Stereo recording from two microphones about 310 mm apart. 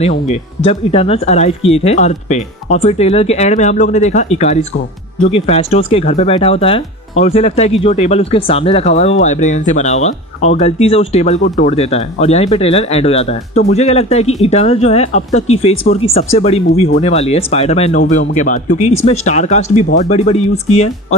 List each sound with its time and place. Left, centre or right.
0.0 s speech: centre